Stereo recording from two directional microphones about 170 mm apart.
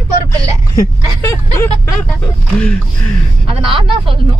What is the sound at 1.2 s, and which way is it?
Speech, 15° left (ahead or behind).